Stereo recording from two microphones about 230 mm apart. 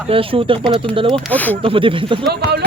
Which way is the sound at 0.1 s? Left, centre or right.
Right.